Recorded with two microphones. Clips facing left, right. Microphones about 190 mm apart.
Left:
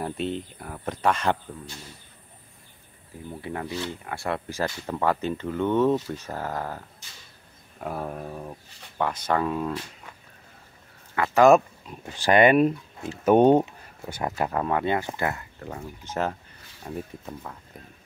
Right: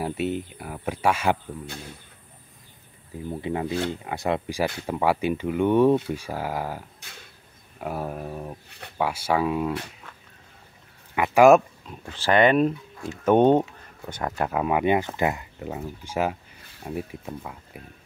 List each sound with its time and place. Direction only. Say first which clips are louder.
0.0 s speech: right 2 dB; 5° right (ahead or behind)
3.3 s speech: right 5 dB; 20° right (ahead or behind)
7.8 s speech: right 1 dB; 5° right (ahead or behind)
8.6 s speech: right 6 dB; 65° right (ahead or behind)
8.9 s speech: right 1 dB; 10° right (ahead or behind)
11.1 s speech: right 2 dB; 15° right (ahead or behind)
12.1 s speech: left 1 dB; 15° left (ahead or behind)
14.5 s speech: right 5 dB; 10° right (ahead or behind)